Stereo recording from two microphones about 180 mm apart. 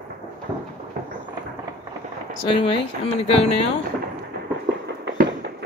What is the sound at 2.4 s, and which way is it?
Speech, 30° left (ahead or behind).